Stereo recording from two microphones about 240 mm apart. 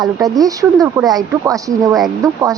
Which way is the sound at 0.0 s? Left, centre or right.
Centre.